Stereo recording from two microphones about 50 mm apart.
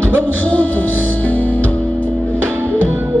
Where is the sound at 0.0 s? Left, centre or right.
Left.